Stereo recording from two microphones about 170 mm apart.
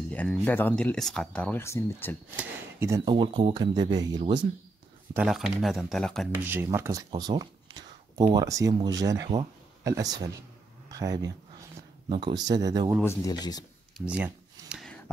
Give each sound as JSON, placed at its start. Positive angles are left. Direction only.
{"t": 0.1, "sound": "a sound", "side_deg": 10}
{"t": 0.5, "sound": "speech", "side_deg": 10}
{"t": 2.3, "sound": "speech", "side_deg": -15}
{"t": 3.1, "sound": "speech", "side_deg": -30}
{"t": 5.1, "sound": "speech", "side_deg": -5}
{"t": 6.3, "sound": "speech", "side_deg": -10}
{"t": 13.0, "sound": "speech", "side_deg": 15}
{"t": 13.9, "sound": "a sound", "side_deg": -5}